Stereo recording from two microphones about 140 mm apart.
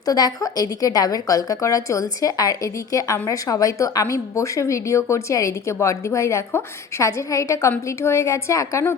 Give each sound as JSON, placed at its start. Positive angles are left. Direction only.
{"t": 0.0, "sound": "a woman's voice", "side_deg": 25}